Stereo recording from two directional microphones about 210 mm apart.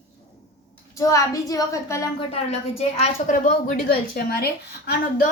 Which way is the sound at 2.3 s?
30° left (ahead or behind).